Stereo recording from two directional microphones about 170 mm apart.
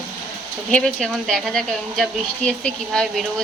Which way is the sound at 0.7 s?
5° left (ahead or behind).